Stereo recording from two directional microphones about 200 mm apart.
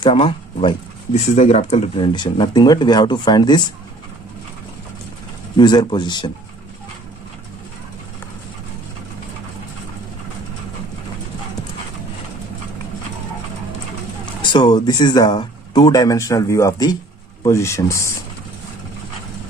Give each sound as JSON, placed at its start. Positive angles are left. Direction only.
{"t": 0.0, "sound": "speech", "side_deg": 25}
{"t": 5.5, "sound": "speech", "side_deg": 20}
{"t": 14.4, "sound": "speech", "side_deg": 20}